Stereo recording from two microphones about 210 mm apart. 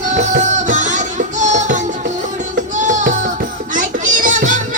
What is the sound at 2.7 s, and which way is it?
Music, 35° right (ahead or behind).